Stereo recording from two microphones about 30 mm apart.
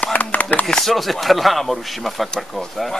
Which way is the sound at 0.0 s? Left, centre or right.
Left.